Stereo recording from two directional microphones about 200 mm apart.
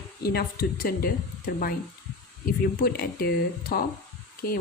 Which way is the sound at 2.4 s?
50° left (ahead or behind).